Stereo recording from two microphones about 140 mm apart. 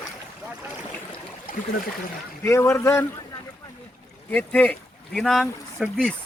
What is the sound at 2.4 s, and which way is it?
Speech, 20° left (ahead or behind).